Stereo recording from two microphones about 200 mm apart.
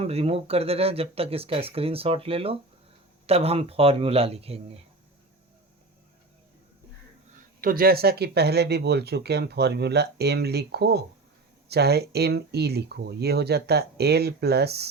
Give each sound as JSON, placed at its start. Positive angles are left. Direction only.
{"t": 0.0, "sound": "speech", "side_deg": -30}
{"t": 7.6, "sound": "speech", "side_deg": -45}